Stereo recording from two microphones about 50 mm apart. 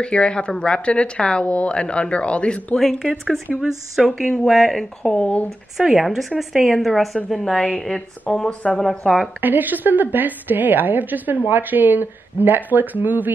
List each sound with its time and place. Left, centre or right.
0.0 s a woman's voice: left
2.7 s speech: centre
3.0 s speech: centre
5.1 s a woman's voice: left
5.8 s speech: centre
9.4 s a woman's voice: right